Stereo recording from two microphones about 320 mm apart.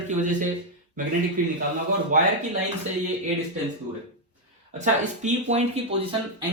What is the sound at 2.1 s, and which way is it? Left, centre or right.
Speech, right.